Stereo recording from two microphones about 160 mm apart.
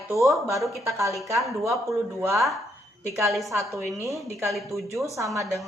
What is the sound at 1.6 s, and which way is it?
Speech, 15° right (ahead or behind).